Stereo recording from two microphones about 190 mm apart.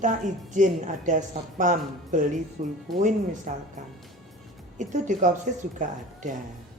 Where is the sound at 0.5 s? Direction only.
40° right (ahead or behind).